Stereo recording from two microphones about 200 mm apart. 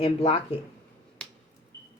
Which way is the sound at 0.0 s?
30° left (ahead or behind).